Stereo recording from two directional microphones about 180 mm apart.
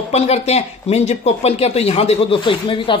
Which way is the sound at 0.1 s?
35° left (ahead or behind).